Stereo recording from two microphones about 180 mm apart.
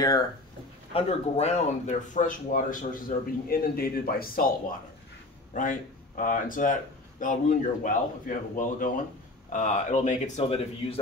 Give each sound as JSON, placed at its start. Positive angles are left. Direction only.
{"t": 0.9, "sound": "speech", "side_deg": 35}
{"t": 5.5, "sound": "speech", "side_deg": 45}